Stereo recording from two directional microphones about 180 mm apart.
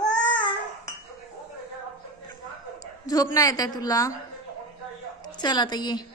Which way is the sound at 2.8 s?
20° left (ahead or behind).